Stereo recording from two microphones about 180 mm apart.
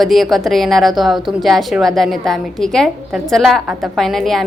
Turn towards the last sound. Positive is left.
turn(degrees=0)  # may be behind; listen again after turning